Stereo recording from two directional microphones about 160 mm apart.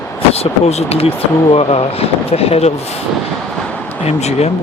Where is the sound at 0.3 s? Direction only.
40° left (ahead or behind).